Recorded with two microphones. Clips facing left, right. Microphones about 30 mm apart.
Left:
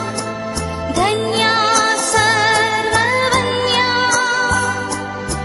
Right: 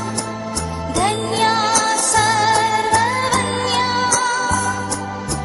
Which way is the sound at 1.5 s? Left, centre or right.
Centre.